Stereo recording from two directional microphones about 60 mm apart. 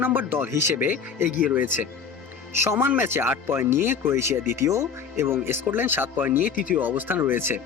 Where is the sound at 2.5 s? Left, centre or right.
Right.